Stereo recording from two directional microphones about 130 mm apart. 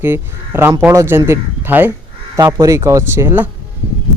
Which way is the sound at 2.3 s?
25° right (ahead or behind).